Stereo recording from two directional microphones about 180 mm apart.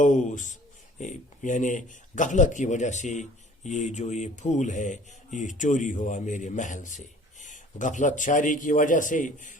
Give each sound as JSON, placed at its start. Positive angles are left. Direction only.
{"t": 0.0, "sound": "speech", "side_deg": 45}